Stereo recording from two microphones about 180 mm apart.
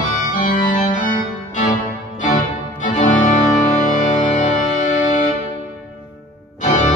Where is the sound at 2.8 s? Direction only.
45° left (ahead or behind).